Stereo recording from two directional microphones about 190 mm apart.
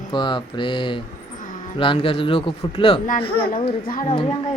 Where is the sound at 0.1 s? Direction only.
25° left (ahead or behind).